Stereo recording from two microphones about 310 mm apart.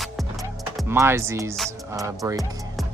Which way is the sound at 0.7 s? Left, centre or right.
Centre.